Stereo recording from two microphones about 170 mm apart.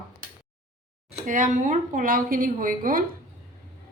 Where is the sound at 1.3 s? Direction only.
50° right (ahead or behind).